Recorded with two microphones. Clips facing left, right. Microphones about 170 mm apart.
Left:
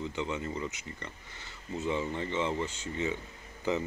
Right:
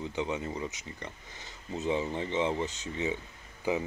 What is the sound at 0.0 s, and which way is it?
Speech, 15° right (ahead or behind).